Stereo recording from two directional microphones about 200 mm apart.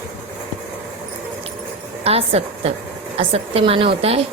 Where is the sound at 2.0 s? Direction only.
30° right (ahead or behind).